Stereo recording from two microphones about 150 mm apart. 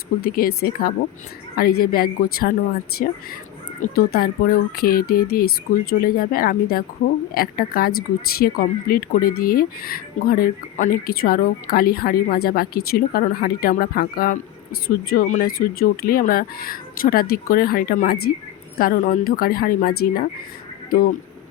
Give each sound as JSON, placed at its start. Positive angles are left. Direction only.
{"t": 0.2, "sound": "speech", "side_deg": 85}
{"t": 20.9, "sound": "speech", "side_deg": 70}